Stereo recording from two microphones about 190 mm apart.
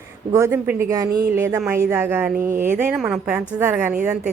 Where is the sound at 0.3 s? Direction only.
15° right (ahead or behind).